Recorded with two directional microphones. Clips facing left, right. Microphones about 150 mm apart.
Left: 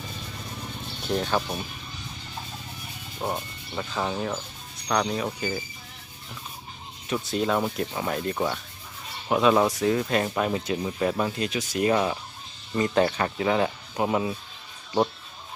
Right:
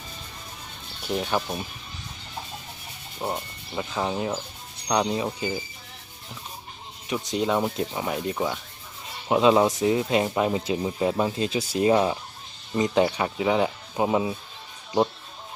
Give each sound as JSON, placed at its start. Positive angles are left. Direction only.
{"t": 1.0, "sound": "speech", "side_deg": -10}
{"t": 3.2, "sound": "speech", "side_deg": 0}
{"t": 3.8, "sound": "speech", "side_deg": -15}
{"t": 7.1, "sound": "speech", "side_deg": -15}
{"t": 9.3, "sound": "speech", "side_deg": -20}